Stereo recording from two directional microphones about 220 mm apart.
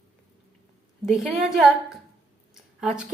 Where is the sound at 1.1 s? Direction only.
Centre (ahead or behind).